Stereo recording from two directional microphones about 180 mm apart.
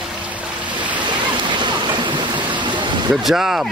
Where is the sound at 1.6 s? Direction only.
25° right (ahead or behind).